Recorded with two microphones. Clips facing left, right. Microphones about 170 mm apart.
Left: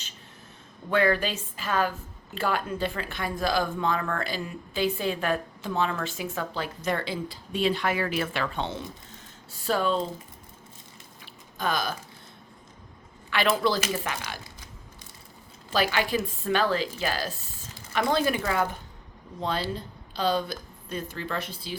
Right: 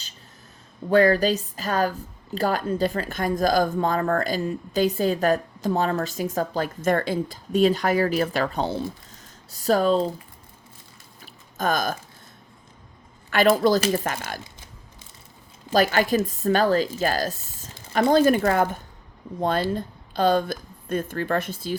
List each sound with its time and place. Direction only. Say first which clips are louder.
0.9 s a woman's voice: right 6 dB; 40° right (ahead or behind)
11.5 s a sound: right 4 dB; 45° right (ahead or behind)
13.3 s speech: right 6 dB; 45° right (ahead or behind)
15.7 s speech: right 6 dB; 45° right (ahead or behind)